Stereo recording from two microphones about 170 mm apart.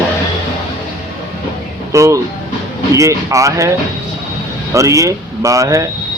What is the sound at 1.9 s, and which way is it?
Speech, 15° right (ahead or behind).